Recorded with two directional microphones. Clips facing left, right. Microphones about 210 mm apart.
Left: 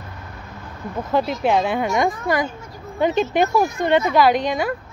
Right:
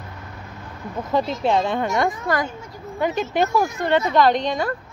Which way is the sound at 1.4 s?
10° left (ahead or behind).